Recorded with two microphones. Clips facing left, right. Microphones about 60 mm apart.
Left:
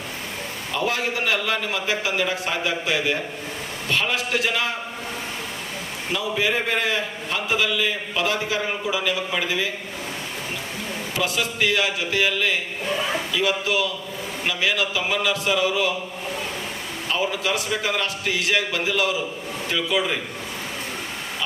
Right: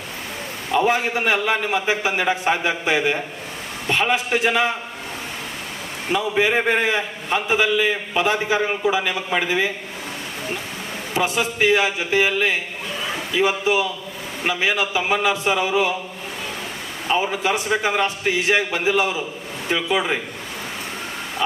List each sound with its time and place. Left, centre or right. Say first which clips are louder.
0.7 s a man's voice: right 6 dB; right
6.1 s a man's voice: right 4 dB; right
11.1 s a man's voice: right 4 dB; right
17.1 s a man's voice: right 4 dB; right